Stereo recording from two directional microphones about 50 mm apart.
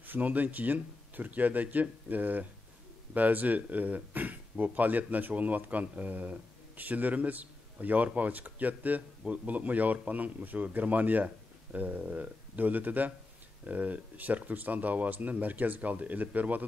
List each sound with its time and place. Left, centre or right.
0.0 s speech: right